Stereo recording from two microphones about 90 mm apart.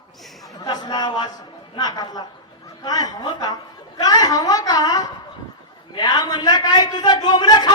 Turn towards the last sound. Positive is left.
turn(degrees=50)  # may be behind; listen again after turning